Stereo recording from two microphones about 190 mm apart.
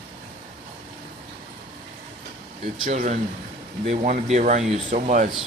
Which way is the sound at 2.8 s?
40° right (ahead or behind).